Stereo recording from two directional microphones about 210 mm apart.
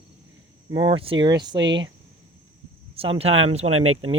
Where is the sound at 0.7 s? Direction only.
20° right (ahead or behind).